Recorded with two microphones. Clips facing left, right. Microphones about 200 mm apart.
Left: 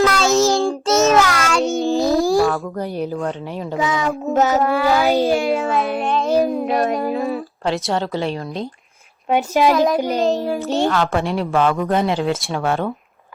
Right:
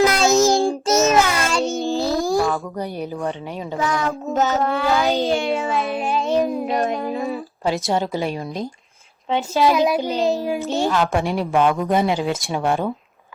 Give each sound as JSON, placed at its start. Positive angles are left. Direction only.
{"t": 0.0, "sound": "child singing", "side_deg": -15}
{"t": 0.9, "sound": "child singing", "side_deg": 0}
{"t": 1.9, "sound": "a sound", "side_deg": 15}
{"t": 2.1, "sound": "a sound", "side_deg": 0}
{"t": 3.8, "sound": "child singing", "side_deg": 0}
{"t": 4.3, "sound": "a woman's voice", "side_deg": 15}
{"t": 4.6, "sound": "child singing", "side_deg": 5}
{"t": 9.3, "sound": "a woman's voice", "side_deg": 15}
{"t": 10.4, "sound": "a woman's voice", "side_deg": -10}
{"t": 11.9, "sound": "child singing", "side_deg": -10}
{"t": 12.5, "sound": "a woman's voice", "side_deg": -15}